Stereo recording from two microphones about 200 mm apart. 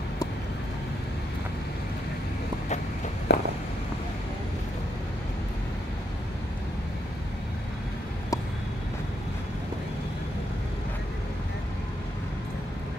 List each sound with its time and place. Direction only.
3.3 s walk: 60° left (ahead or behind)